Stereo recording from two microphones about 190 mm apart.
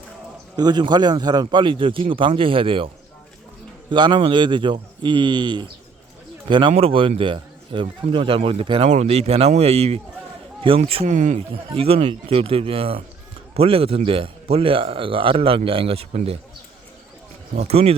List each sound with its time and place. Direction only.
0.5 s a man's voice: 20° right (ahead or behind)
17.5 s speech: 35° right (ahead or behind)